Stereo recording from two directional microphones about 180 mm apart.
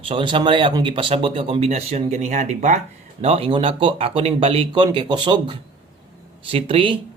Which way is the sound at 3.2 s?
35° right (ahead or behind).